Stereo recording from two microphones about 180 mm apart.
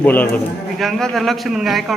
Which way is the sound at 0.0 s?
10° left (ahead or behind).